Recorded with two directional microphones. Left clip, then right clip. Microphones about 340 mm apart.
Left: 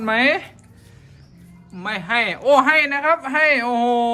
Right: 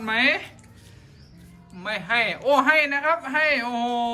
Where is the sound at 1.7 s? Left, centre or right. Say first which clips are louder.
Left 3 dB; centre.